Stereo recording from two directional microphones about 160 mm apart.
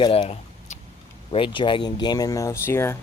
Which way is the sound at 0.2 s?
50° left (ahead or behind).